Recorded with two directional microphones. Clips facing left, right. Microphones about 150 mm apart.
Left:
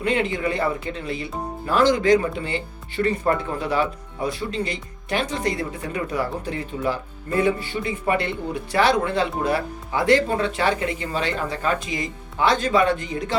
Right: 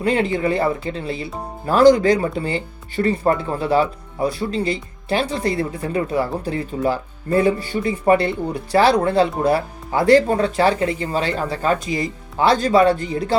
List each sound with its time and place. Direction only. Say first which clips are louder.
0.0 s speech: right 4 dB; 35° right (ahead or behind)